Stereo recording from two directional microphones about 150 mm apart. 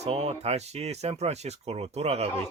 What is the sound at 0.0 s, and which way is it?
Speech, 45° right (ahead or behind).